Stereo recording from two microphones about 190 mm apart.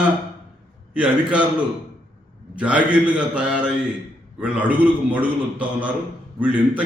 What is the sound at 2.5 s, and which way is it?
A man's voice, 5° right (ahead or behind).